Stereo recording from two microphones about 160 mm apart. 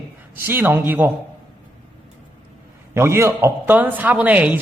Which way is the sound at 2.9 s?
15° right (ahead or behind).